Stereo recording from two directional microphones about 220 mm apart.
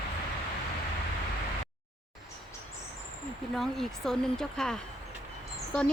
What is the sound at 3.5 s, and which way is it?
Speech, centre (ahead or behind).